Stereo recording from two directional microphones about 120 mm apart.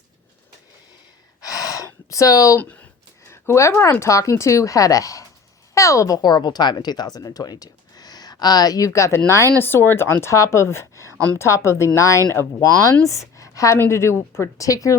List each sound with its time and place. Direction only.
1.4 s gasp: 30° left (ahead or behind)
2.6 s a woman's voice: 15° left (ahead or behind)